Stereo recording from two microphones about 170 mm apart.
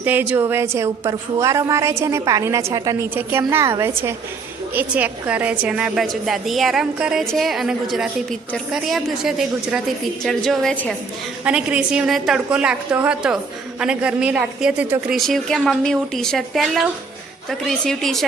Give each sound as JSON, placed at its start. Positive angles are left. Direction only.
{"t": 0.0, "sound": "a woman's voice", "side_deg": -10}
{"t": 11.4, "sound": "a woman's voice", "side_deg": -5}